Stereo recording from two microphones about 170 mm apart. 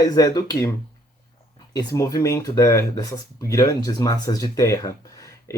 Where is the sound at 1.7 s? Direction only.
20° left (ahead or behind).